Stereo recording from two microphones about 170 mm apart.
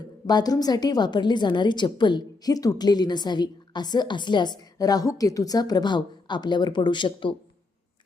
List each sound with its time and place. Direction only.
0.3 s a woman's voice: 25° left (ahead or behind)